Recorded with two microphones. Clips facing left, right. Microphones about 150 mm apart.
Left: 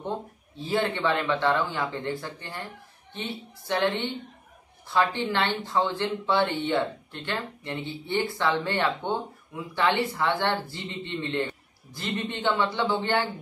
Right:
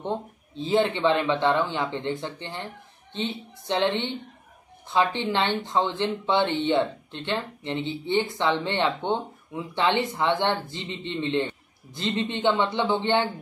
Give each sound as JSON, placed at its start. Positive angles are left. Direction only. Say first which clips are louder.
{"t": 0.6, "sound": "speech", "louder": "right 4 dB", "side_deg": -20}